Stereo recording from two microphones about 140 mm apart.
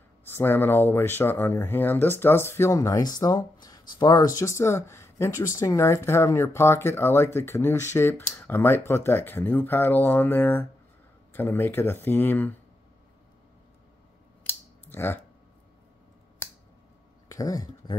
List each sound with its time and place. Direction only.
0.3 s speech: 15° left (ahead or behind)
14.4 s scissors: 15° left (ahead or behind)
17.3 s speech: 25° left (ahead or behind)